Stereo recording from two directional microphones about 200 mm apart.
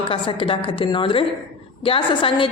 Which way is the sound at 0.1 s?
25° left (ahead or behind).